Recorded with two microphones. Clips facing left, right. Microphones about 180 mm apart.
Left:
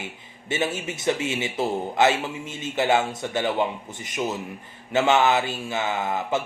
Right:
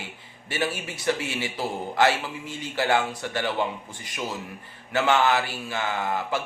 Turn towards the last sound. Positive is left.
turn(degrees=20)  # may be behind; listen again after turning